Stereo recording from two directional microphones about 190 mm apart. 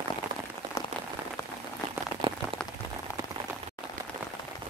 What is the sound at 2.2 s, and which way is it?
Rain on surface, 25° right (ahead or behind).